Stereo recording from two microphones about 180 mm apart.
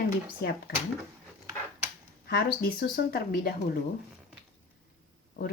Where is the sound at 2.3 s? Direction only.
60° left (ahead or behind).